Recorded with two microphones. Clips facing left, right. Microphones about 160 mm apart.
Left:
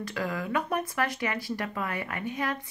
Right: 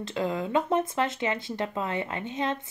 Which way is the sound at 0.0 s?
25° right (ahead or behind).